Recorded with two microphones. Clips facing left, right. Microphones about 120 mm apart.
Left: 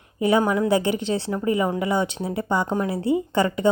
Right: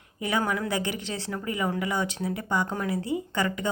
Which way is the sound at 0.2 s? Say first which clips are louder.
Left 8 dB; 25° left (ahead or behind).